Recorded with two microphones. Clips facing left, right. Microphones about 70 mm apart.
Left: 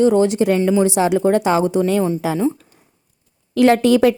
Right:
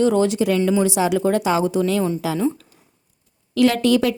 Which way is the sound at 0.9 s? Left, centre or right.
Left.